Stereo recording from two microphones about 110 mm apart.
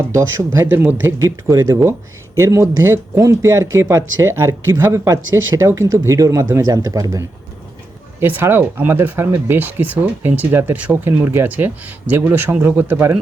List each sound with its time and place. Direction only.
0.1 s speech: 25° right (ahead or behind)
8.2 s speech: 20° right (ahead or behind)